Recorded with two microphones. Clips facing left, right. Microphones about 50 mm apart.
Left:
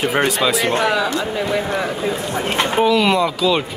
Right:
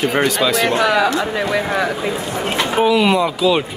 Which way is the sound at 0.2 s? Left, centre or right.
Left.